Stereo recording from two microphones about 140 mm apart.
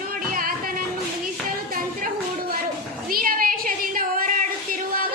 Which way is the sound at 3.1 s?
90° right.